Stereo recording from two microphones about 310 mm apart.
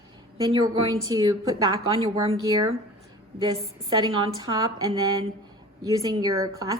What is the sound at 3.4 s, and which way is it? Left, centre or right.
A woman's voice, centre.